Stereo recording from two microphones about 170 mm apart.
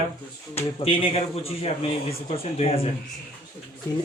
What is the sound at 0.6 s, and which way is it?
Speech, 35° left (ahead or behind).